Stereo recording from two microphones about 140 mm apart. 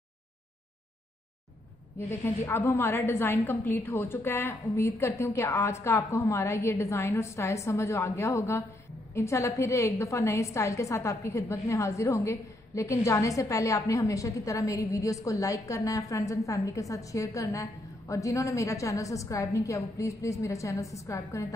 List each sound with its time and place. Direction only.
2.0 s a woman's voice: 20° left (ahead or behind)